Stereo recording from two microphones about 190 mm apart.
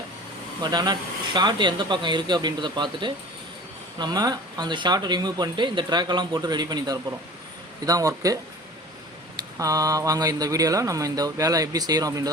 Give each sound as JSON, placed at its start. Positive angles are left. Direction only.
{"t": 0.6, "sound": "speech", "side_deg": -20}